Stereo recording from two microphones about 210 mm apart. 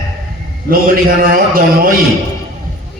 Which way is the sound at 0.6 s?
45° right (ahead or behind).